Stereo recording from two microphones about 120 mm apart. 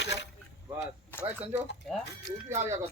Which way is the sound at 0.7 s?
15° right (ahead or behind).